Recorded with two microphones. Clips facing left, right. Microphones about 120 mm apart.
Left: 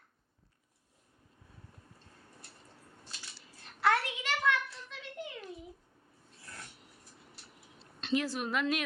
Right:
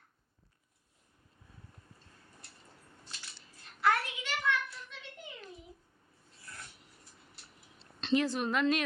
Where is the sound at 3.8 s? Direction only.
90° left.